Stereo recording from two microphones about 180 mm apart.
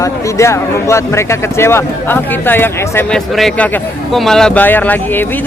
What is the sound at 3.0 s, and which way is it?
A man's voice, centre (ahead or behind).